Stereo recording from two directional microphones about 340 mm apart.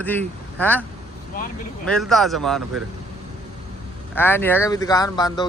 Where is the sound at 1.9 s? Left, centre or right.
Centre.